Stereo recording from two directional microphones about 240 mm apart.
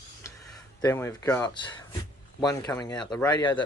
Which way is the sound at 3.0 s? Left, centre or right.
Centre.